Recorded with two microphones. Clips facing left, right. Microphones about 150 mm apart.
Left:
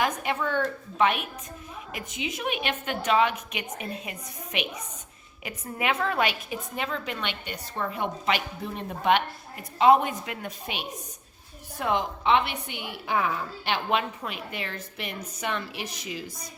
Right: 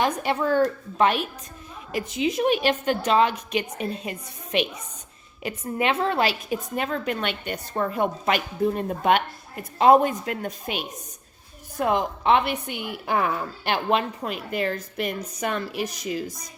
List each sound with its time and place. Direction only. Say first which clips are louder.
0.0 s a woman's voice: right 4 dB; 35° right (ahead or behind)
6.5 s a woman's voice: right 5 dB; 45° right (ahead or behind)